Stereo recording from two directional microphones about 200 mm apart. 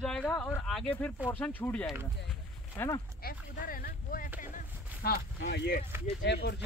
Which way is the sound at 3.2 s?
45° left (ahead or behind).